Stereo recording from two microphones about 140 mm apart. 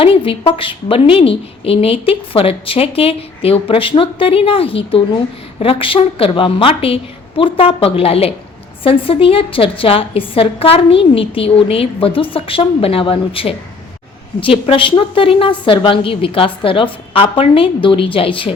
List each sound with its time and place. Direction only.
0.0 s a woman's voice: 40° left (ahead or behind)